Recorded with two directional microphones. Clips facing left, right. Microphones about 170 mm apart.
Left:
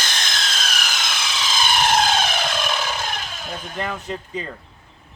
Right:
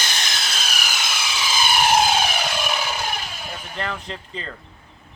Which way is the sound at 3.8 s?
10° left (ahead or behind).